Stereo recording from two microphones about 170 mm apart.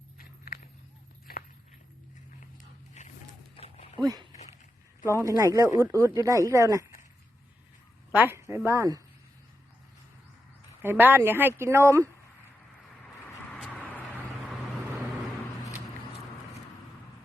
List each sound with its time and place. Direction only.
0.2 s walk: 60° left (ahead or behind)
3.0 s a sound: 40° left (ahead or behind)
3.6 s dog: 35° left (ahead or behind)
4.0 s speech: 20° right (ahead or behind)
8.1 s speech: 10° right (ahead or behind)
10.8 s speech: 10° right (ahead or behind)
13.6 s vehicle: 5° left (ahead or behind)